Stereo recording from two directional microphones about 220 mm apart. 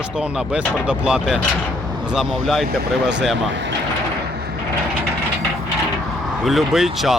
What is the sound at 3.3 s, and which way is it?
Speech, 55° right (ahead or behind).